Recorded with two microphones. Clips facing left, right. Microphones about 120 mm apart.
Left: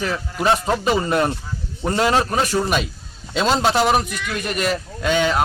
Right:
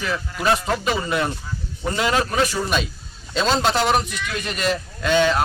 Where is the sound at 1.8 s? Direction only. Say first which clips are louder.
Left 3 dB; 35° left (ahead or behind).